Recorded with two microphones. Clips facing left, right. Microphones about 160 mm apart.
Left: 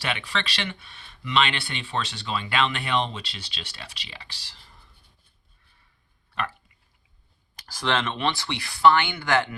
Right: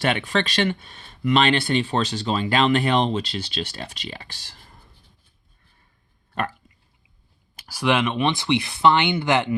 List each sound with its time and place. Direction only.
0.0 s speech: 50° right (ahead or behind)
6.4 s speech: 45° right (ahead or behind)
7.6 s speech: 10° right (ahead or behind)